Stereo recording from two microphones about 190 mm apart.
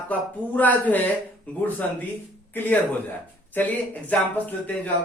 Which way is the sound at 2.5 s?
10° left (ahead or behind).